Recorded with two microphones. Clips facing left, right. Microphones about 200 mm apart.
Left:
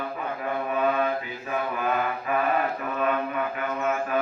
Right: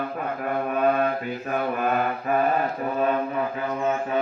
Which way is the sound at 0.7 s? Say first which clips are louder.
Right 2 dB; 45° right (ahead or behind).